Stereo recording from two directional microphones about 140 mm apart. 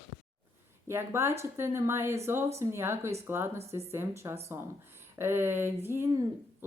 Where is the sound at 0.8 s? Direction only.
15° right (ahead or behind).